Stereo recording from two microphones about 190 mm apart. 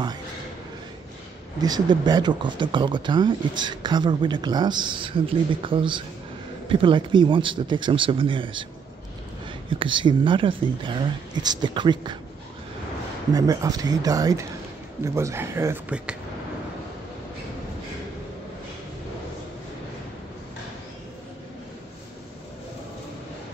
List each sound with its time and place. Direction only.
1.6 s speech: 20° right (ahead or behind)
9.7 s speech: 25° right (ahead or behind)
13.3 s a man's voice: 20° right (ahead or behind)